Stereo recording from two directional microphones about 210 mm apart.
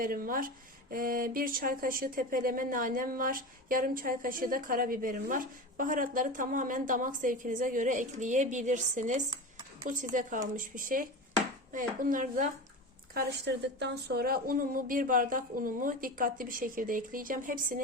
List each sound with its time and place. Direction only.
0.0 s speech: 40° right (ahead or behind)
13.1 s speech: 55° right (ahead or behind)